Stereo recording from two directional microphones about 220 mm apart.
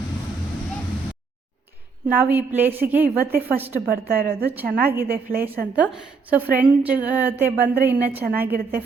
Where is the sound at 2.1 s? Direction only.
10° right (ahead or behind).